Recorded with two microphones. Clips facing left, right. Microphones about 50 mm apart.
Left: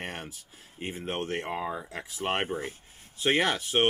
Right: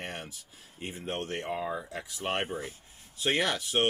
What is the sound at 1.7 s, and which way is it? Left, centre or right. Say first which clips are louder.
Speech: even; centre.